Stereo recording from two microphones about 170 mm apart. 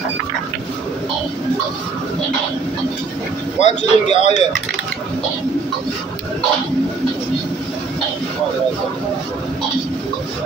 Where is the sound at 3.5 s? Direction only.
40° left (ahead or behind).